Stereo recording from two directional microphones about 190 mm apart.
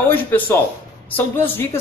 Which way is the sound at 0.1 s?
10° left (ahead or behind).